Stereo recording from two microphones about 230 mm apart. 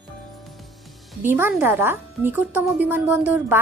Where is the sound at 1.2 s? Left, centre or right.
Centre.